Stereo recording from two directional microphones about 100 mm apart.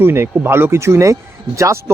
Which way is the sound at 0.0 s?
25° right (ahead or behind).